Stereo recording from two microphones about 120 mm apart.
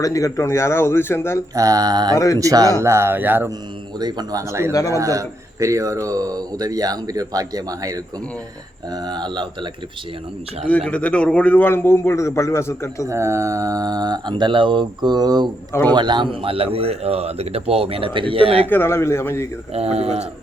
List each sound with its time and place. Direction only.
0.0 s a man's voice: 30° left (ahead or behind)
1.5 s speech: 30° right (ahead or behind)
2.1 s a man's voice: 25° left (ahead or behind)
2.4 s speech: 30° right (ahead or behind)
4.0 s speech: 35° right (ahead or behind)
4.7 s a man's voice: 30° left (ahead or behind)
4.9 s speech: 25° right (ahead or behind)
10.9 s a man's voice: 10° left (ahead or behind)
13.1 s speech: 25° right (ahead or behind); by 18.7 s 50° right (ahead or behind)
18.7 s a man's voice: 20° left (ahead or behind)
19.7 s speech: 60° right (ahead or behind)